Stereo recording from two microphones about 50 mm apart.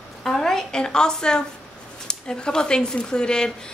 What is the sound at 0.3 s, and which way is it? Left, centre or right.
A woman's voice, centre.